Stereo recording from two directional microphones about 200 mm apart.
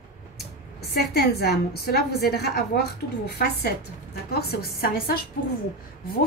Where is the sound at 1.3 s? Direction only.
55° left (ahead or behind).